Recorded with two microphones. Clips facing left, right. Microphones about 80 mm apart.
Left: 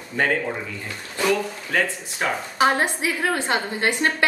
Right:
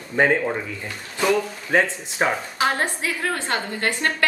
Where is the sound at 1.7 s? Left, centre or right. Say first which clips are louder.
Right 4 dB; right.